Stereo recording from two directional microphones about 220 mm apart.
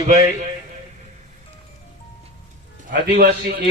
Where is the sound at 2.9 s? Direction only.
45° right (ahead or behind).